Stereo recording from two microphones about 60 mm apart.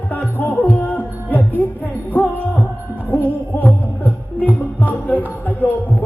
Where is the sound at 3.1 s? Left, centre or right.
Left.